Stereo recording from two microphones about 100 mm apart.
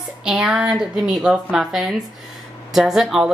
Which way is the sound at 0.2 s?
5° right (ahead or behind).